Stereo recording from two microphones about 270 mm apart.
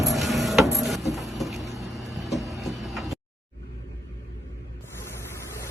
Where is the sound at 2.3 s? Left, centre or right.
Centre.